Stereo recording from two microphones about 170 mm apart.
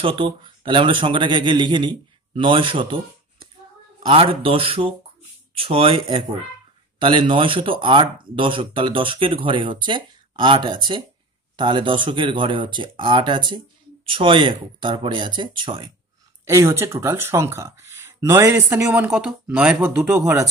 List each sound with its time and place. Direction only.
0.0 s speech: 30° right (ahead or behind)
16.4 s speech: 15° right (ahead or behind)
19.0 s speech: 5° right (ahead or behind)
19.8 s speech: 15° right (ahead or behind)